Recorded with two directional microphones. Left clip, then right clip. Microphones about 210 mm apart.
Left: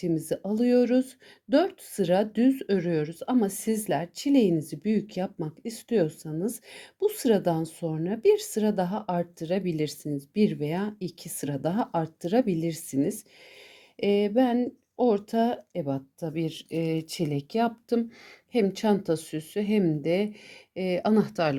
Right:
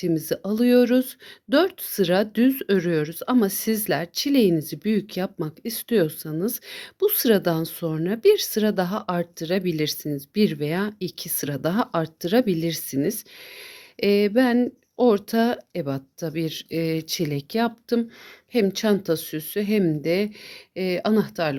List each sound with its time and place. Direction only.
0.0 s speech: 25° right (ahead or behind); by 21.5 s 5° right (ahead or behind)